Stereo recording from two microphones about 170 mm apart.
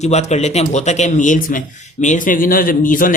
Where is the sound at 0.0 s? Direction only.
40° left (ahead or behind).